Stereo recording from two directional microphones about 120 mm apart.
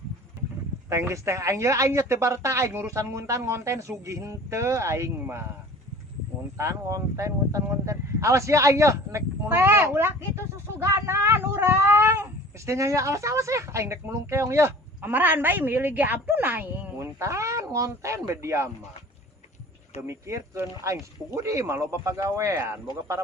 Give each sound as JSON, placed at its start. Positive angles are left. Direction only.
{"t": 0.9, "sound": "speech", "side_deg": -25}
{"t": 6.6, "sound": "speech", "side_deg": -25}
{"t": 20.0, "sound": "speech", "side_deg": -25}